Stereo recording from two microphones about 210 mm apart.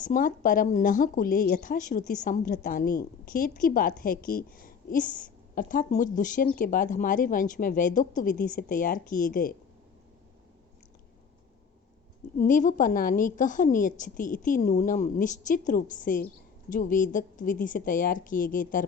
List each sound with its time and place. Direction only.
0.0 s a woman's voice: 40° left (ahead or behind)
12.4 s a woman's voice: 40° left (ahead or behind)